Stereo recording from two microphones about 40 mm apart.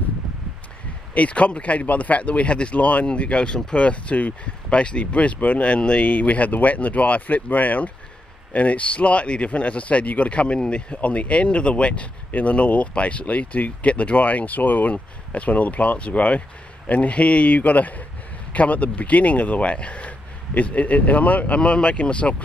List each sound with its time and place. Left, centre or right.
1.1 s speech: left
6.0 s speech: left
14.9 s speech: left
21.5 s speech: left